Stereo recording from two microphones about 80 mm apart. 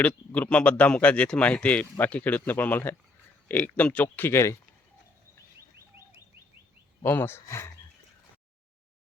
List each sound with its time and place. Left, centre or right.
0.3 s speech: centre; by 4.5 s left
7.0 s speech: left